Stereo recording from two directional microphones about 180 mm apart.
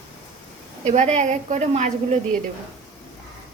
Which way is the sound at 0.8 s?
40° right (ahead or behind).